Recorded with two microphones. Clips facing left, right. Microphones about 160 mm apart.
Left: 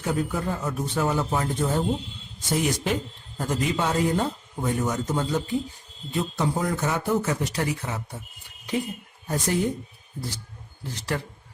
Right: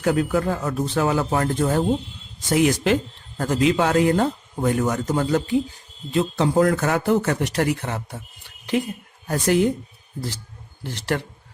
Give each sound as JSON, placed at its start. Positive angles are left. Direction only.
{"t": 0.0, "sound": "speech", "side_deg": -85}
{"t": 2.5, "sound": "a man's voice", "side_deg": -90}
{"t": 8.4, "sound": "a sound", "side_deg": -90}
{"t": 9.2, "sound": "a man's voice", "side_deg": -85}
{"t": 10.8, "sound": "speech", "side_deg": -70}